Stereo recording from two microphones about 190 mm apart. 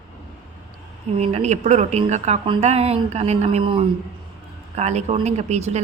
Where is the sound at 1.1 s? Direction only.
35° right (ahead or behind).